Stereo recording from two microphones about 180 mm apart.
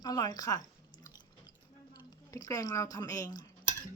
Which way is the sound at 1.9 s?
20° left (ahead or behind).